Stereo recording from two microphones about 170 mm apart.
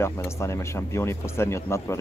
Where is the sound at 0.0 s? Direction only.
15° left (ahead or behind).